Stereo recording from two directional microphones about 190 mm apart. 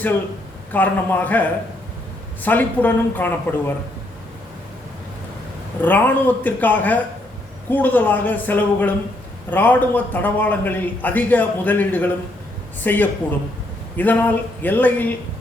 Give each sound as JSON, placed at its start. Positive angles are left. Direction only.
{"t": 0.7, "sound": "a man's voice", "side_deg": 10}
{"t": 5.8, "sound": "a man's voice", "side_deg": 10}